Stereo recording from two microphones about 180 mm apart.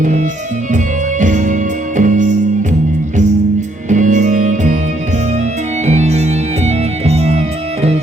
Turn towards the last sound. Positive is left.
turn(degrees=-35)  # may be behind; listen again after turning